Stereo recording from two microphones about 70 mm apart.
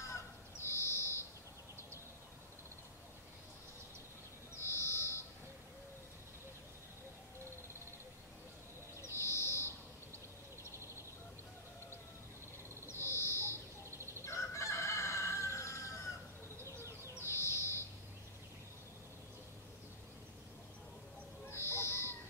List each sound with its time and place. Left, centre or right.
0.1 s fowl: left
4.6 s owl: left
9.0 s bird: left
12.8 s owl: left
13.9 s fowl: right
14.2 s crowing: left
16.6 s bird: right
17.1 s bird: left
21.5 s owl: left